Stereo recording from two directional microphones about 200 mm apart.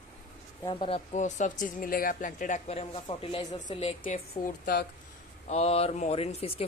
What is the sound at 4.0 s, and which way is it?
Speech, 45° left (ahead or behind).